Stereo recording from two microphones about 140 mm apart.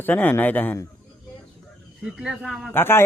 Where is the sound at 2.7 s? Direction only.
15° left (ahead or behind).